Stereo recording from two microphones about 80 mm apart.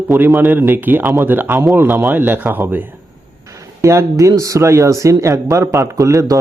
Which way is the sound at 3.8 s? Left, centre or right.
Right.